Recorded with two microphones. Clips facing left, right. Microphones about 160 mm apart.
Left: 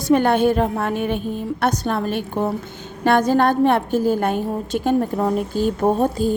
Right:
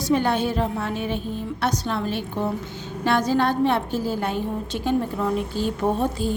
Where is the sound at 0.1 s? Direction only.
55° left (ahead or behind).